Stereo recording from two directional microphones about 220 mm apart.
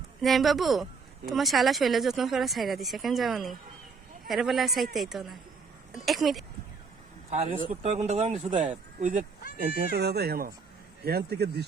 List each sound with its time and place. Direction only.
0.2 s speech: centre (ahead or behind)
7.3 s speech: 30° right (ahead or behind)
9.6 s speech: 45° right (ahead or behind)